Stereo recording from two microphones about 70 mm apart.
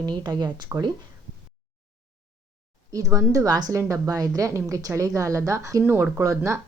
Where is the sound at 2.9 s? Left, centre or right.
Right.